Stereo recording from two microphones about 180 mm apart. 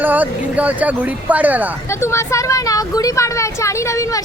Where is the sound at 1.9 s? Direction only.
15° left (ahead or behind).